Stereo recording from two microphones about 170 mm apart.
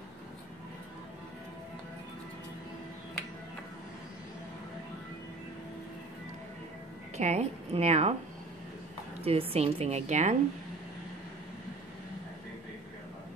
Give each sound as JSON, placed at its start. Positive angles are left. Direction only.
{"t": 7.2, "sound": "a woman's voice", "side_deg": -40}
{"t": 9.2, "sound": "a woman's voice", "side_deg": -35}